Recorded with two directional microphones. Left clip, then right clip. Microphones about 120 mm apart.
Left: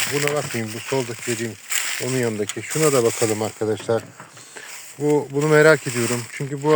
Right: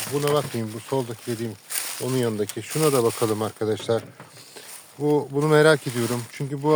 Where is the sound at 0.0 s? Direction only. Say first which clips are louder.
Left 2 dB; 35° left (ahead or behind).